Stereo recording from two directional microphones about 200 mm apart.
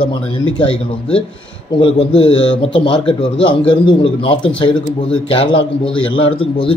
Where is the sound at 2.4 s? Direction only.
65° left (ahead or behind).